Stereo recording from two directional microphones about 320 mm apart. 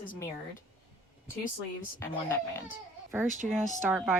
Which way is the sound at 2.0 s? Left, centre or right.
Centre.